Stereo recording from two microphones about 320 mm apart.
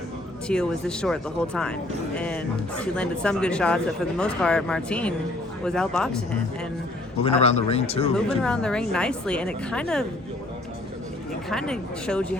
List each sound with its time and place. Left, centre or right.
0.4 s a woman's voice: centre
7.2 s speech: centre
8.1 s a woman's voice: centre
11.4 s a woman's voice: centre